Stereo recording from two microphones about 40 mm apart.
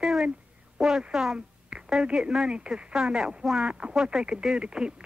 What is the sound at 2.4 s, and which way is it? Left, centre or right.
Speech, right.